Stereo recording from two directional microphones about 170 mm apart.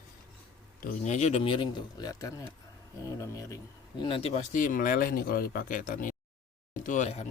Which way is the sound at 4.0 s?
30° left (ahead or behind).